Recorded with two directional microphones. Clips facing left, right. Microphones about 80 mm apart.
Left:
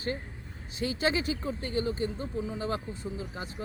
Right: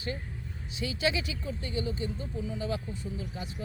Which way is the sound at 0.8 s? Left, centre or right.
Left.